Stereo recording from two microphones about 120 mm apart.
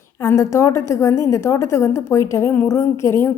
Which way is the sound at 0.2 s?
25° left (ahead or behind).